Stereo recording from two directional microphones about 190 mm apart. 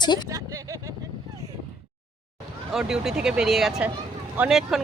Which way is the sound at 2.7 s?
5° right (ahead or behind).